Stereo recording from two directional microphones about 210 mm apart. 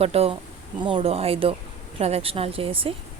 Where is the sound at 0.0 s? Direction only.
30° right (ahead or behind).